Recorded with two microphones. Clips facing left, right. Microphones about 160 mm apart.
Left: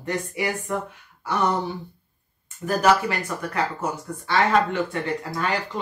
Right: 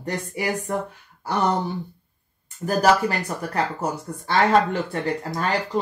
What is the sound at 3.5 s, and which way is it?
Speech, 35° right (ahead or behind).